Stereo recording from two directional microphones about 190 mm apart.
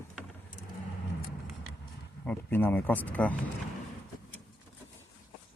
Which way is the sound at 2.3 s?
10° left (ahead or behind).